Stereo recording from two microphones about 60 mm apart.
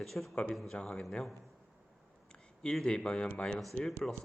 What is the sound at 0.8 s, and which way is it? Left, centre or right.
Speech, centre.